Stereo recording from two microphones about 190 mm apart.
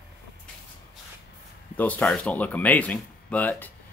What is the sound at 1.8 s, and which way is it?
Speech, 10° left (ahead or behind).